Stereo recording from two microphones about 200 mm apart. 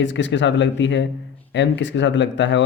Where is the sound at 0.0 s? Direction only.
65° left (ahead or behind).